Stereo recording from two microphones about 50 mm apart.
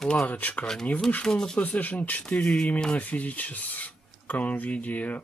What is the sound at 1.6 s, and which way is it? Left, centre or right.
Speech, left.